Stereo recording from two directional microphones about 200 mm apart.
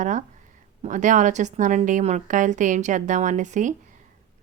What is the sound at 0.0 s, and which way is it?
A woman's voice, 40° right (ahead or behind).